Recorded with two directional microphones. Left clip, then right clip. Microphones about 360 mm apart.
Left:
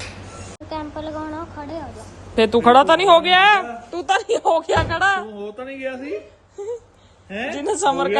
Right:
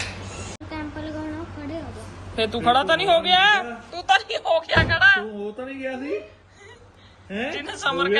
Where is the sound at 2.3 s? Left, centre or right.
Left.